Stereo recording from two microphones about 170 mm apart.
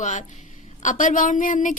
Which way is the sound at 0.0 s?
45° left (ahead or behind).